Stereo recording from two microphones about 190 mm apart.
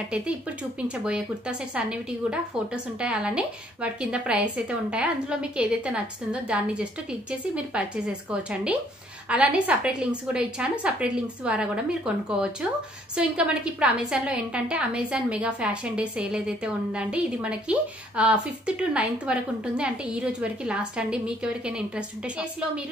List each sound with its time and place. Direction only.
0.7 s a woman's voice: 5° right (ahead or behind)